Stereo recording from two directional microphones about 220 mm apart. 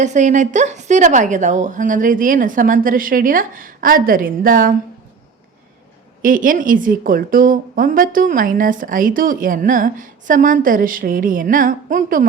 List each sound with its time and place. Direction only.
0.0 s a woman's voice: 35° right (ahead or behind)
6.2 s a woman's voice: 40° right (ahead or behind)